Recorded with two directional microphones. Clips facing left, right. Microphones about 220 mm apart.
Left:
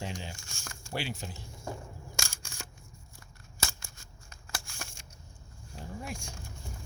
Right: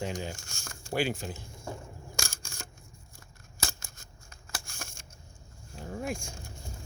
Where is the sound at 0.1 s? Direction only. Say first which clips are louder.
Right 5 dB; 45° right (ahead or behind).